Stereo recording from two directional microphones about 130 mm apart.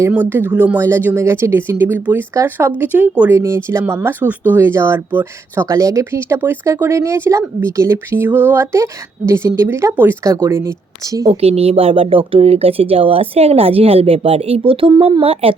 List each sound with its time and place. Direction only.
0.1 s speech: 15° right (ahead or behind)
11.3 s speech: 50° right (ahead or behind)
15.2 s speech: 50° right (ahead or behind)